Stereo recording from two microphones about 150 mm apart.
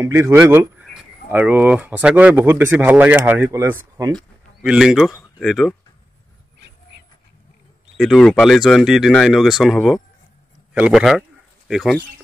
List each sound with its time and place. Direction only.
0.0 s speech: 20° right (ahead or behind)
4.1 s speech: centre (ahead or behind)
8.0 s speech: centre (ahead or behind)